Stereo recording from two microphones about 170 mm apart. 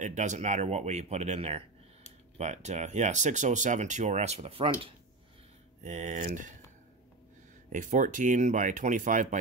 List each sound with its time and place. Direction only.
0.0 s speech: 45° right (ahead or behind)
5.8 s speech: 45° right (ahead or behind)
7.7 s speech: 45° right (ahead or behind)